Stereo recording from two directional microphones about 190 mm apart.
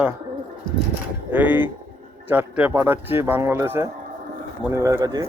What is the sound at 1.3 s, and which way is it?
A man's voice, 10° right (ahead or behind).